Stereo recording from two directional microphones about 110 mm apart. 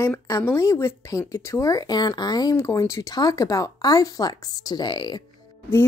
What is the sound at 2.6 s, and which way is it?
Speech, 25° left (ahead or behind).